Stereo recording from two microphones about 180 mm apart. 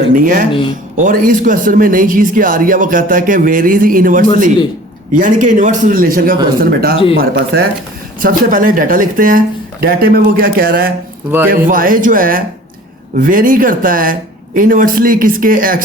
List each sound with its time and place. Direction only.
0.1 s speech: 50° right (ahead or behind)
8.2 s speech: 50° right (ahead or behind)